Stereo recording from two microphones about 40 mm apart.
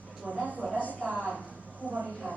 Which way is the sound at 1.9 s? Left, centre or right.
Right.